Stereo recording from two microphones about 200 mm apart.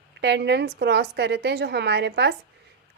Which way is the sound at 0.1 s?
60° right (ahead or behind).